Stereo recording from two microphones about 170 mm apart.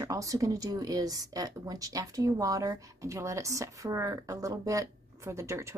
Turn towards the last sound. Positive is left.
turn(degrees=-15)  # may be behind; listen again after turning